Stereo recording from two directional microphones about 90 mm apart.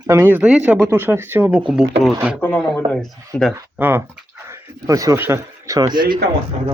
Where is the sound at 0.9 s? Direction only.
25° right (ahead or behind); by 3.5 s 5° left (ahead or behind).